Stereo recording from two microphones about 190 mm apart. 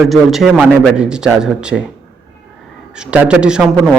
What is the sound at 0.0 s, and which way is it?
Speech, centre (ahead or behind).